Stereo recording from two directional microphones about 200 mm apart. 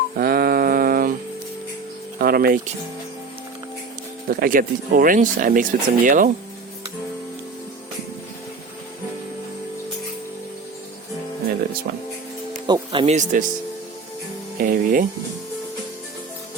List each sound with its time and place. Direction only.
0.2 s a sound: 50° right (ahead or behind)
2.1 s speech: 50° right (ahead or behind)
4.3 s speech: 45° right (ahead or behind)
12.6 s music: 25° right (ahead or behind)
14.6 s music: 45° right (ahead or behind)